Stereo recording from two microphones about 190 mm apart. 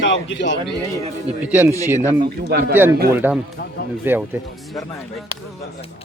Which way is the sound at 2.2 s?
55° right (ahead or behind).